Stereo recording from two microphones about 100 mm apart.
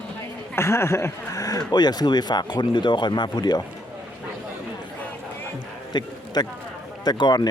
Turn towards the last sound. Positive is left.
turn(degrees=45)  # may be behind; listen again after turning